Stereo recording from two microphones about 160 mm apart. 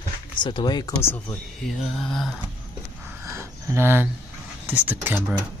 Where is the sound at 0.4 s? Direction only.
30° left (ahead or behind).